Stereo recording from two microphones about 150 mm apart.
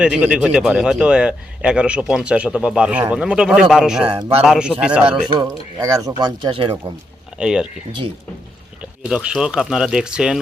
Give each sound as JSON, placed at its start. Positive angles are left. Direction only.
{"t": 0.0, "sound": "a man's voice", "side_deg": -5}
{"t": 4.0, "sound": "speech", "side_deg": -35}
{"t": 4.4, "sound": "a man's voice", "side_deg": -5}
{"t": 5.3, "sound": "speech", "side_deg": -25}
{"t": 7.3, "sound": "speech", "side_deg": -5}
{"t": 8.8, "sound": "speech", "side_deg": -5}